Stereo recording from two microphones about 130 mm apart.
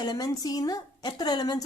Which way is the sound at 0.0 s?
30° left (ahead or behind).